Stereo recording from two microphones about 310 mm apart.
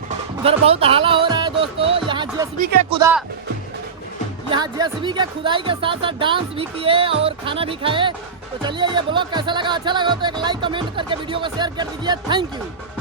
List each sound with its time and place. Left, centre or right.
0.4 s music: centre
2.9 s speech: centre
4.4 s speech: centre